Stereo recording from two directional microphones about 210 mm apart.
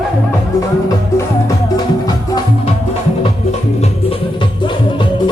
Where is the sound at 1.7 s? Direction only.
20° left (ahead or behind).